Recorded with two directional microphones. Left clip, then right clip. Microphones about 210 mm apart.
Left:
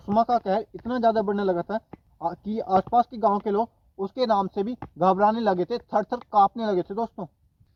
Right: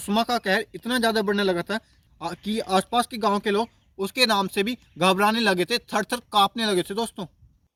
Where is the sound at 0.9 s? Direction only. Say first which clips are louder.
Left 1 dB; 20° right (ahead or behind).